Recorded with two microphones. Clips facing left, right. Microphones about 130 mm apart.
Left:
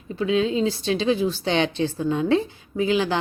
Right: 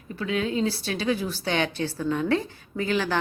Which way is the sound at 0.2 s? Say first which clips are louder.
Left 5 dB; 20° left (ahead or behind).